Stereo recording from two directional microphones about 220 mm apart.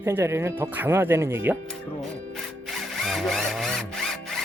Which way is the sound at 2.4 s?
Centre (ahead or behind).